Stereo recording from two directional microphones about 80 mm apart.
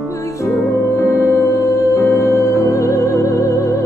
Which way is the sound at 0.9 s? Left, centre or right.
Left.